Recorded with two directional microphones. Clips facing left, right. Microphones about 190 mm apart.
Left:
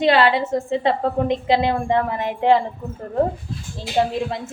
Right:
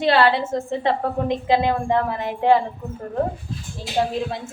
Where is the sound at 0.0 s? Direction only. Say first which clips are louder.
Left 1 dB; 20° left (ahead or behind).